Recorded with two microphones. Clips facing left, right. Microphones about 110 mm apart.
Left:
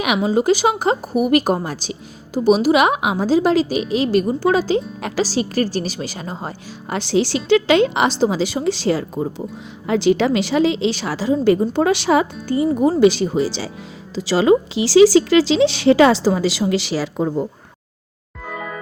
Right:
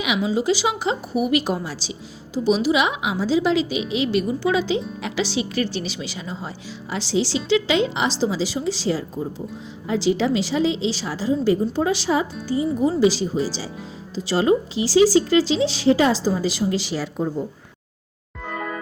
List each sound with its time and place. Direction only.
0.0 s a woman's voice: 50° left (ahead or behind); by 13.7 s 70° left (ahead or behind)
14.2 s speech: 90° left
18.5 s music: centre (ahead or behind)